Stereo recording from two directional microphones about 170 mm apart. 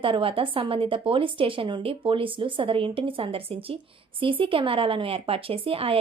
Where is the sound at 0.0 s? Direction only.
30° right (ahead or behind).